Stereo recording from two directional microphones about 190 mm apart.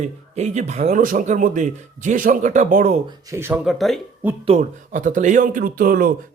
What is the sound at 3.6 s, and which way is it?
Speech, centre (ahead or behind).